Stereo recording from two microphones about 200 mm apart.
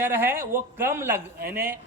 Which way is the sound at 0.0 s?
10° right (ahead or behind).